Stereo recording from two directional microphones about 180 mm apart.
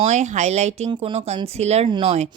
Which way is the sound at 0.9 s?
25° right (ahead or behind).